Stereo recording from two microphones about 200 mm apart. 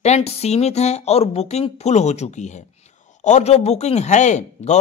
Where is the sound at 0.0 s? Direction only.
30° left (ahead or behind).